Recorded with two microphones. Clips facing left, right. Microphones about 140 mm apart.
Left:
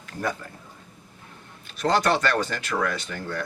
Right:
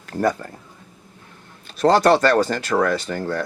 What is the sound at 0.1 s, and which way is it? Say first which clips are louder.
Speech: right 9 dB; 40° right (ahead or behind).